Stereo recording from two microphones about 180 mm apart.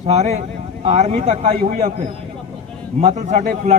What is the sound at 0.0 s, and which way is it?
A man's voice, 35° right (ahead or behind).